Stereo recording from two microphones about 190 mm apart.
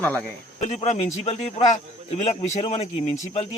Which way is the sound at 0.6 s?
35° left (ahead or behind).